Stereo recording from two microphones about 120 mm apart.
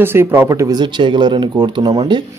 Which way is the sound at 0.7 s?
40° right (ahead or behind).